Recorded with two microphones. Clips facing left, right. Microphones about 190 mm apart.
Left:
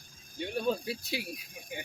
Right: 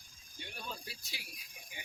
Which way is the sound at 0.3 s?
60° left (ahead or behind).